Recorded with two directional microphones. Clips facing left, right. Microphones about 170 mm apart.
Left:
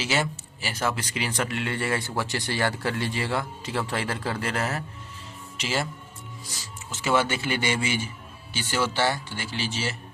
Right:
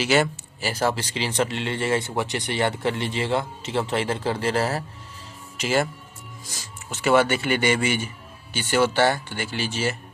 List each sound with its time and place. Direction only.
0.0 s speech: 60° right (ahead or behind)
0.6 s speech: 35° right (ahead or behind)
5.5 s speech: 50° right (ahead or behind)
6.9 s speech: 60° right (ahead or behind)